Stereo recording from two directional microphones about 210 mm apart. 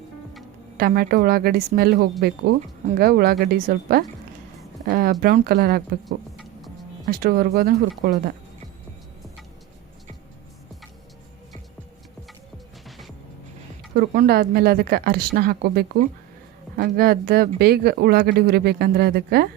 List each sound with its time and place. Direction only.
0.8 s speech: 45° right (ahead or behind)
6.3 s music: centre (ahead or behind)
7.2 s speech: 45° right (ahead or behind)
13.9 s speech: 45° right (ahead or behind)